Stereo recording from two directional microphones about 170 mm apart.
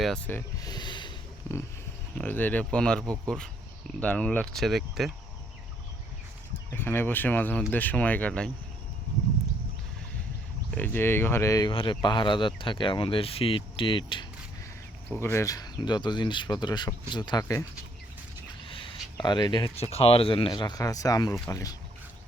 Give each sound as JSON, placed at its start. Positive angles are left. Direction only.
{"t": 0.3, "sound": "speech", "side_deg": 10}
{"t": 0.7, "sound": "a sound", "side_deg": 25}
{"t": 2.1, "sound": "speech", "side_deg": 10}
{"t": 6.7, "sound": "speech", "side_deg": 15}
{"t": 10.8, "sound": "speech", "side_deg": 10}
{"t": 11.7, "sound": "speech", "side_deg": 30}
{"t": 15.1, "sound": "speech", "side_deg": 15}
{"t": 18.7, "sound": "speech", "side_deg": 30}